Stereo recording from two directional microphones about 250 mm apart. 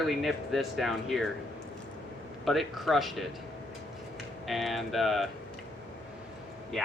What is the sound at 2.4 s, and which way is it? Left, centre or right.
Speech, centre.